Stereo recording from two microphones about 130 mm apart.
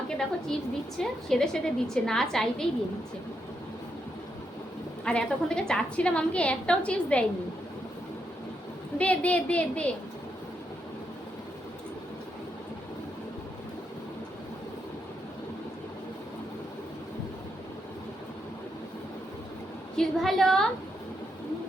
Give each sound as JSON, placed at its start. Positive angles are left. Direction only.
{"t": 0.1, "sound": "a woman's voice", "side_deg": 5}
{"t": 5.0, "sound": "a woman's voice", "side_deg": 5}
{"t": 9.0, "sound": "a woman's voice", "side_deg": 10}
{"t": 20.0, "sound": "a woman's voice", "side_deg": 5}